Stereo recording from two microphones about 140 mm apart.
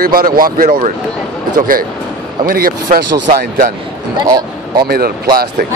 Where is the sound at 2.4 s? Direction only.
90° right.